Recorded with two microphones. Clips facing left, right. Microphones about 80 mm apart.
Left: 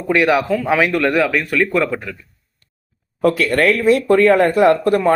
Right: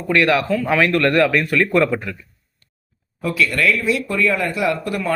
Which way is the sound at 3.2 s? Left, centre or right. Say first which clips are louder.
Left 5 dB; left.